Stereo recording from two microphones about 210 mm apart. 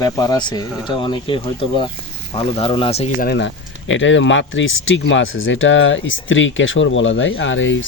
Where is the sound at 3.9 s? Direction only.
60° left (ahead or behind).